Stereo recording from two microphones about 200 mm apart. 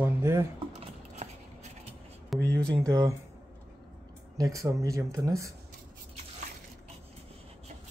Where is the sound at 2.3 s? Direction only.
Centre (ahead or behind).